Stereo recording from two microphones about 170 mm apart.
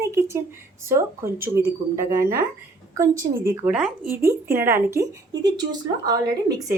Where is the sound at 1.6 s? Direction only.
65° right (ahead or behind).